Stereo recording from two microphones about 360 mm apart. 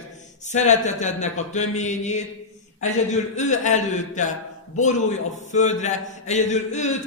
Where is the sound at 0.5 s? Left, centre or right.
Centre.